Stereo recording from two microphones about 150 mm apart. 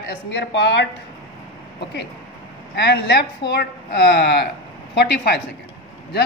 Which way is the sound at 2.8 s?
90° left.